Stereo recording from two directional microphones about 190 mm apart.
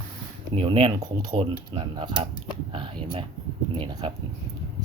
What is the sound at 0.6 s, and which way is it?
Speech, 25° right (ahead or behind).